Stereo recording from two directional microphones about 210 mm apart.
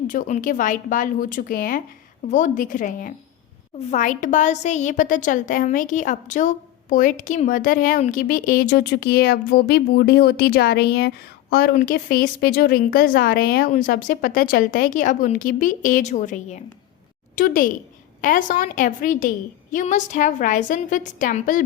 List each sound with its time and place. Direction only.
0.1 s a woman's voice: 35° left (ahead or behind)